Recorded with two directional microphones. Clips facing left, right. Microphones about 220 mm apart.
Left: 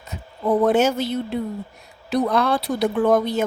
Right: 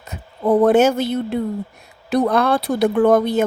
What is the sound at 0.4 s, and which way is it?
A woman's voice, 55° right (ahead or behind).